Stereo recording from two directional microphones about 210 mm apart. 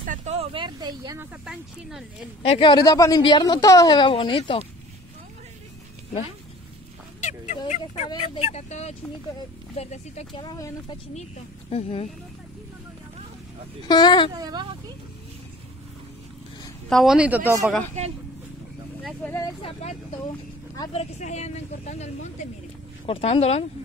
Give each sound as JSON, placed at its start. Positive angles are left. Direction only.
{"t": 0.0, "sound": "speech", "side_deg": -35}
{"t": 1.4, "sound": "speech", "side_deg": -5}
{"t": 2.4, "sound": "a woman's voice", "side_deg": 25}
{"t": 7.2, "sound": "a sound", "side_deg": 35}
{"t": 8.1, "sound": "speech", "side_deg": 30}
{"t": 10.4, "sound": "a woman's voice", "side_deg": 20}
{"t": 13.8, "sound": "a woman's voice", "side_deg": 20}
{"t": 14.3, "sound": "speech", "side_deg": -20}
{"t": 16.9, "sound": "speech", "side_deg": 0}
{"t": 19.3, "sound": "a woman's voice", "side_deg": 20}
{"t": 20.7, "sound": "a woman's voice", "side_deg": 25}